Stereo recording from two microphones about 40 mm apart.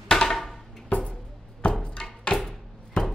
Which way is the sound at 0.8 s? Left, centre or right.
Left.